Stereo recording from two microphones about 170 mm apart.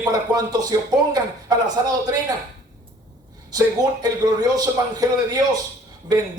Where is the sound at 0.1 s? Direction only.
20° right (ahead or behind).